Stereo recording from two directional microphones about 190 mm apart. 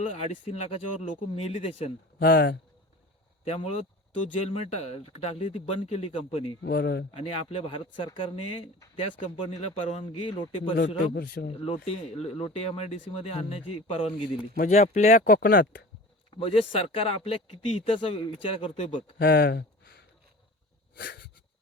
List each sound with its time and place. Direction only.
0.0 s speech: 35° left (ahead or behind)
2.1 s speech: 55° left (ahead or behind)
3.4 s speech: 30° left (ahead or behind)
6.6 s a man's voice: 55° left (ahead or behind)
7.1 s speech: 30° left (ahead or behind)
10.8 s a man's voice: 60° left (ahead or behind)
11.4 s speech: 30° left (ahead or behind); by 15.9 s 50° left (ahead or behind)
16.4 s speech: 30° left (ahead or behind)
19.2 s speech: 55° left (ahead or behind)
20.9 s a sound: 60° left (ahead or behind)